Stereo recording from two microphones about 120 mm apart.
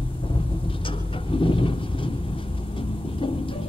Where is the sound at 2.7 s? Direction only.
45° left (ahead or behind).